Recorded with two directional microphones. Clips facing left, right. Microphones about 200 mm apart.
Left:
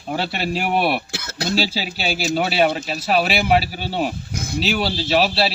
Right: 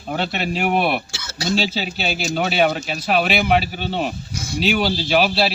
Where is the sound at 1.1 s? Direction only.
60° left (ahead or behind).